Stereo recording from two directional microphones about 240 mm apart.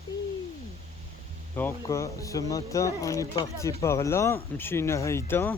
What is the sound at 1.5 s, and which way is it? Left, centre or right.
Speech, centre.